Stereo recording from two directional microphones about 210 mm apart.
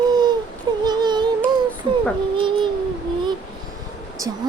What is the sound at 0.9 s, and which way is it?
Music, 20° right (ahead or behind).